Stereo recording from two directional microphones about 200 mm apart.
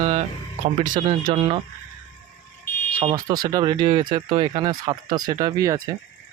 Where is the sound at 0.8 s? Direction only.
40° right (ahead or behind).